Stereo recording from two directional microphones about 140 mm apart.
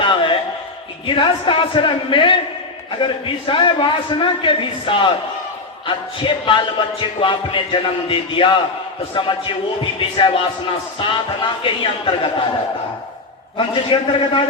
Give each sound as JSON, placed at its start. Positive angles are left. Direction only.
{"t": 0.0, "sound": "a sound", "side_deg": 35}
{"t": 1.0, "sound": "speech", "side_deg": 35}
{"t": 13.6, "sound": "speech", "side_deg": 40}